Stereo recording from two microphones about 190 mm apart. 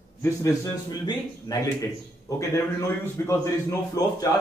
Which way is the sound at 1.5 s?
20° left (ahead or behind).